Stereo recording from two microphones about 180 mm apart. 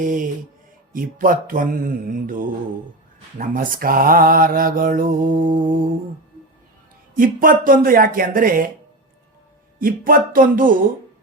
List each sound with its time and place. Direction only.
0.0 s mantra: 45° right (ahead or behind)
7.2 s mantra: 50° right (ahead or behind)
9.8 s mantra: 50° right (ahead or behind)